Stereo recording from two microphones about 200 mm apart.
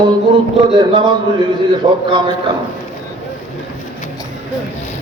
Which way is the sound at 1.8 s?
20° right (ahead or behind).